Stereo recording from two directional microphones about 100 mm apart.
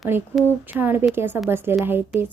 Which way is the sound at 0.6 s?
20° right (ahead or behind).